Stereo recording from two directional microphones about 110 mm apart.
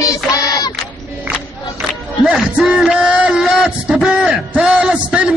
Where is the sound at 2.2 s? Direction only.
5° right (ahead or behind).